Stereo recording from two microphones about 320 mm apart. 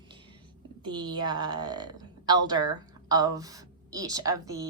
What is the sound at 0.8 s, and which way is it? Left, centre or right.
A woman's voice, centre.